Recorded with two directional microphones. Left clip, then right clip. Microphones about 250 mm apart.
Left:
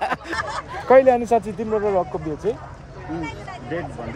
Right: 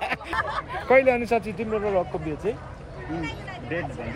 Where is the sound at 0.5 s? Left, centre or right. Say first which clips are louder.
Left 5 dB; centre.